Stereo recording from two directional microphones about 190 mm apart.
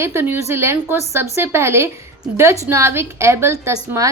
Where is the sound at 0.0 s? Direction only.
10° right (ahead or behind).